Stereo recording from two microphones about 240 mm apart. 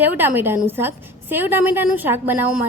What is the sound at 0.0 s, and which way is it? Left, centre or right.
A woman's voice, centre.